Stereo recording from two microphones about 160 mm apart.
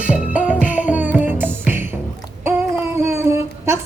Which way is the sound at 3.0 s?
15° right (ahead or behind).